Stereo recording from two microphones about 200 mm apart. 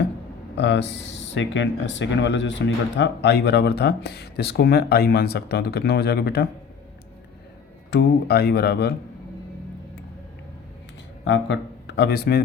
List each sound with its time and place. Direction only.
0.5 s speech: 60° left (ahead or behind)
7.9 s speech: 55° left (ahead or behind)
11.3 s speech: 60° left (ahead or behind)